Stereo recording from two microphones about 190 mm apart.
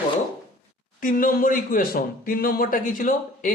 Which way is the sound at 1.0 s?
45° left (ahead or behind).